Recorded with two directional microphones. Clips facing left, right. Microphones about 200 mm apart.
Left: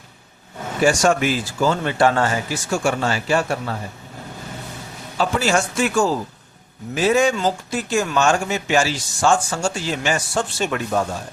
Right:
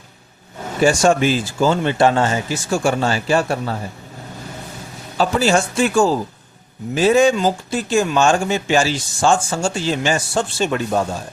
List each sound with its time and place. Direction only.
0.9 s speech: 30° right (ahead or behind)
5.1 s speech: 30° right (ahead or behind)